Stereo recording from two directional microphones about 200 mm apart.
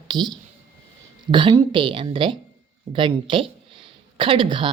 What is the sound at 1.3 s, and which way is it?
A woman's voice, 25° right (ahead or behind).